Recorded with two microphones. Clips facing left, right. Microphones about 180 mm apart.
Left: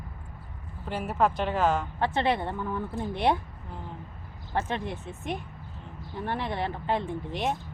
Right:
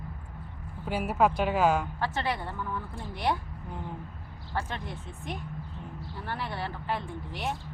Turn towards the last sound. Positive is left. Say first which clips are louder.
# left 5 dB
turn(degrees=20)  # may be behind; listen again after turning